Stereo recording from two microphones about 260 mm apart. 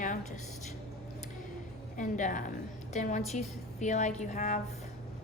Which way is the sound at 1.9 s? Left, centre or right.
Left.